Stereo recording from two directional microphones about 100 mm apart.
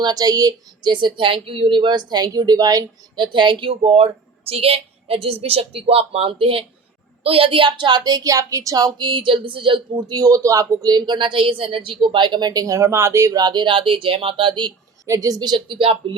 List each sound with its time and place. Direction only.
0.0 s a woman's voice: 40° right (ahead or behind)
15.0 s a woman's voice: 35° right (ahead or behind); by 16.0 s 60° right (ahead or behind)